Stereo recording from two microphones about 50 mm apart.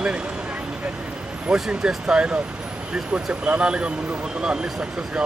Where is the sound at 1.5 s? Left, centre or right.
Centre.